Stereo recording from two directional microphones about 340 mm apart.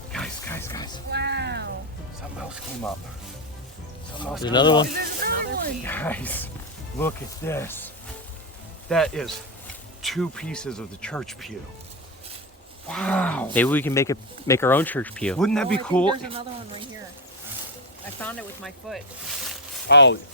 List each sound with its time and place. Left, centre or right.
0.1 s roaring cats: centre
1.1 s a sound: right
4.4 s speech: centre
4.9 s speech: right
5.8 s speech: centre
8.9 s speech: centre
12.9 s speech: centre
18.2 s speech: centre
19.9 s speech: left